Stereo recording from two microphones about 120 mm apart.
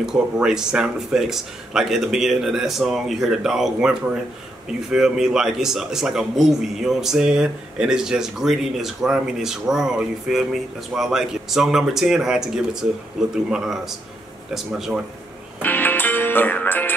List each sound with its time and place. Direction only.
0.0 s speech: 5° right (ahead or behind)
4.9 s speech: 5° right (ahead or behind)
15.6 s music: 15° left (ahead or behind)